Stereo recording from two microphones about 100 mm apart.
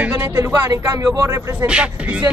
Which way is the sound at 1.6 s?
10° right (ahead or behind).